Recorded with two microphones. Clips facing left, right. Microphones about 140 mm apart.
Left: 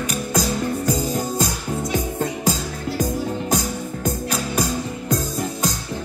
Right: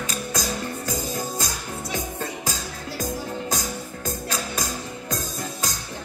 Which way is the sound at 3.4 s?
20° left (ahead or behind).